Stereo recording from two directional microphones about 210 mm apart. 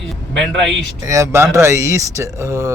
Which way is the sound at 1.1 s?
15° right (ahead or behind).